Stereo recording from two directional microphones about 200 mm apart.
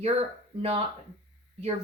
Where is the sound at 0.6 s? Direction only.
30° right (ahead or behind).